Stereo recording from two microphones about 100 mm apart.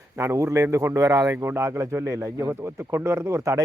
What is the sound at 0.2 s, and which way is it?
A man's voice, 30° right (ahead or behind).